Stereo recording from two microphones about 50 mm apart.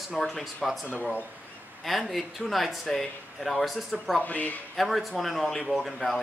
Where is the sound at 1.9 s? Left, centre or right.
Centre.